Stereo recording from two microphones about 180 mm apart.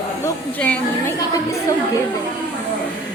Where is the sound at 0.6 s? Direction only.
10° left (ahead or behind).